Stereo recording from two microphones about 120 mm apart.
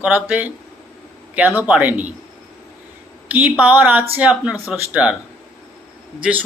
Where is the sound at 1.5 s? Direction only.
10° right (ahead or behind).